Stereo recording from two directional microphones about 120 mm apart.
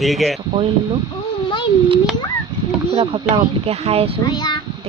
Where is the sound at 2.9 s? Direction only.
50° right (ahead or behind).